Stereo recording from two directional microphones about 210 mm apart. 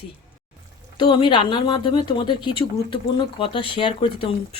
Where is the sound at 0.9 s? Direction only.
20° left (ahead or behind).